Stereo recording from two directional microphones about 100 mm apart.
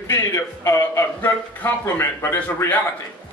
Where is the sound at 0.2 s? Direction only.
25° left (ahead or behind).